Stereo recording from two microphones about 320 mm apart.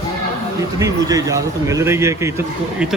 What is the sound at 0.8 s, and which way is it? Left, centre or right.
A man's voice, centre.